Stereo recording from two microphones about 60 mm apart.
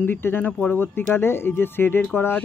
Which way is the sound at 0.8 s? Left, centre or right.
Left.